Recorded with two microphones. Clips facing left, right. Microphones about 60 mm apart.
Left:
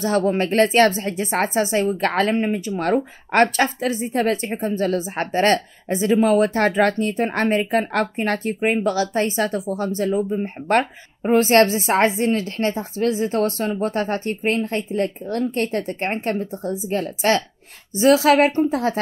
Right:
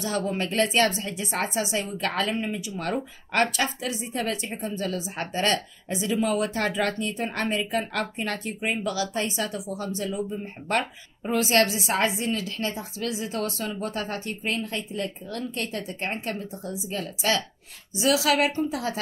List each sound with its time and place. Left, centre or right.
0.0 s a woman's voice: left